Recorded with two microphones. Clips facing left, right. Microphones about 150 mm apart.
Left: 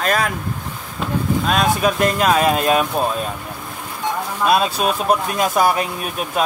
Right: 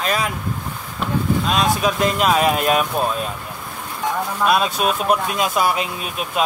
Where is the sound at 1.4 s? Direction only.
50° left (ahead or behind).